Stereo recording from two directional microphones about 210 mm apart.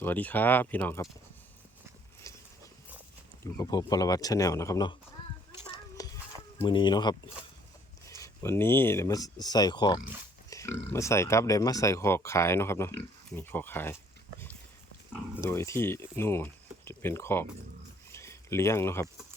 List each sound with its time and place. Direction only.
0.0 s speech: 10° left (ahead or behind)
2.3 s a sound: 15° left (ahead or behind)
3.4 s speech: 15° left (ahead or behind)
6.0 s stir: 15° left (ahead or behind)
6.6 s speech: 20° left (ahead or behind)
8.2 s speech: 10° left (ahead or behind)
15.4 s speech: 15° left (ahead or behind)
18.1 s a sound: 15° left (ahead or behind)